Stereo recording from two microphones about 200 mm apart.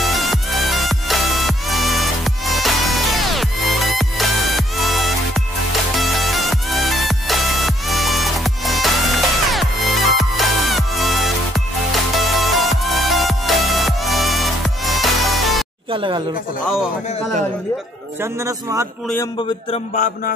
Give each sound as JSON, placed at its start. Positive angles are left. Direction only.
{"t": 0.0, "sound": "music", "side_deg": 0}
{"t": 15.9, "sound": "a sound", "side_deg": -25}
{"t": 18.2, "sound": "a man's voice", "side_deg": -15}
{"t": 19.7, "sound": "mantra", "side_deg": 40}